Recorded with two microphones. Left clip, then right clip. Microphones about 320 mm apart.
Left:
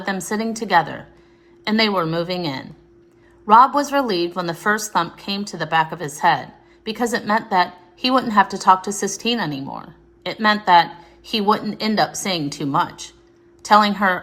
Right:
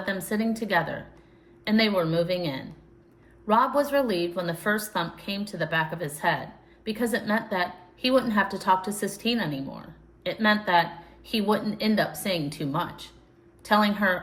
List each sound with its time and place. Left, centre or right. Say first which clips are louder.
0.0 s a woman's voice: left 5 dB; centre